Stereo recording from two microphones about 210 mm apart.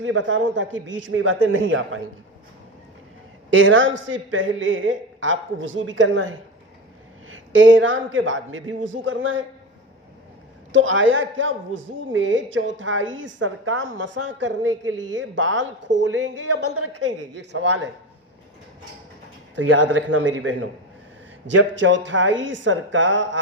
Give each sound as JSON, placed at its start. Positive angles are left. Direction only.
{"t": 0.0, "sound": "a man's voice", "side_deg": -65}
{"t": 3.5, "sound": "speech", "side_deg": -65}
{"t": 7.5, "sound": "speech", "side_deg": -65}
{"t": 10.7, "sound": "speech", "side_deg": -65}
{"t": 19.5, "sound": "speech", "side_deg": -60}